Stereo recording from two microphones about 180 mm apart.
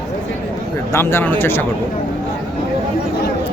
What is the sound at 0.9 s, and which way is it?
Speech, 15° left (ahead or behind).